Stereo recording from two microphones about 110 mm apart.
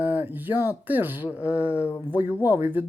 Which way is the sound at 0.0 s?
15° right (ahead or behind).